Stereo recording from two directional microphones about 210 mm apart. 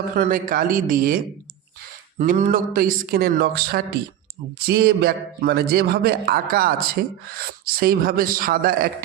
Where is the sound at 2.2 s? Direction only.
35° right (ahead or behind).